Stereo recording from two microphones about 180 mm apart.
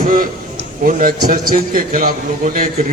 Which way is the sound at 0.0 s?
50° right (ahead or behind).